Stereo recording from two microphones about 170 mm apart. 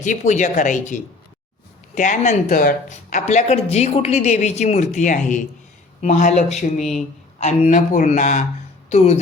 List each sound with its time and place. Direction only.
0.0 s speech: 45° left (ahead or behind)